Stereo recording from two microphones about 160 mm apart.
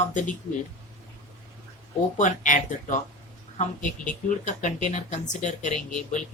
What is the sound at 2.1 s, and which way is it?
Speech, 50° left (ahead or behind).